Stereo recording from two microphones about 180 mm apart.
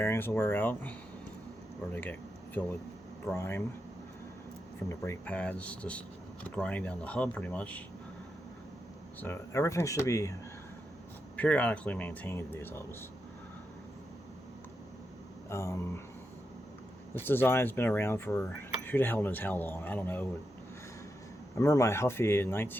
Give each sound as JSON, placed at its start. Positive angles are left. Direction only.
{"t": 0.0, "sound": "speech", "side_deg": 15}
{"t": 4.9, "sound": "speech", "side_deg": 10}
{"t": 9.2, "sound": "speech", "side_deg": 15}
{"t": 11.3, "sound": "speech", "side_deg": 10}
{"t": 15.4, "sound": "speech", "side_deg": 15}
{"t": 17.2, "sound": "speech", "side_deg": 10}
{"t": 21.5, "sound": "speech", "side_deg": 20}